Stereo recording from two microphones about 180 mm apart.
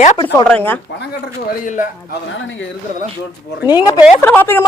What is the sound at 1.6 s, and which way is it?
Speech, 45° left (ahead or behind).